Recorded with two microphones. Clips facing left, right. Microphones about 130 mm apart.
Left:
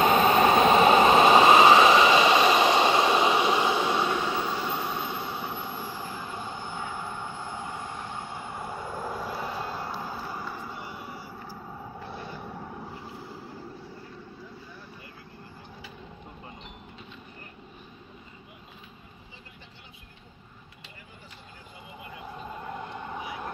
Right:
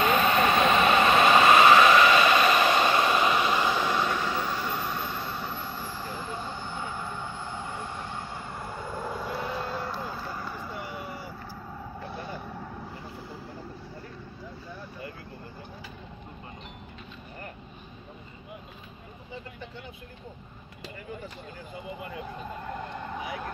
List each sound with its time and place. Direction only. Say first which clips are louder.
0.0 s vehicle: left 3 dB; 30° left (ahead or behind); by 10.4 s 10° left (ahead or behind)
22.7 s vehicle: right 1 dB; 15° left (ahead or behind)